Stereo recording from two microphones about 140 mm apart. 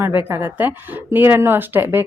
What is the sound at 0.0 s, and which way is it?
A woman's voice, 15° right (ahead or behind).